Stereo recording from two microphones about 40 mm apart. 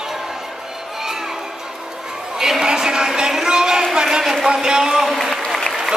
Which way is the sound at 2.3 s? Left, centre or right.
Centre.